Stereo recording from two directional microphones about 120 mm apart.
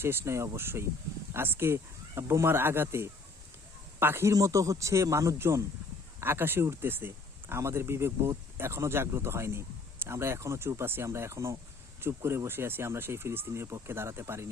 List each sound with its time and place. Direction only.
0.0 s speech: 20° right (ahead or behind)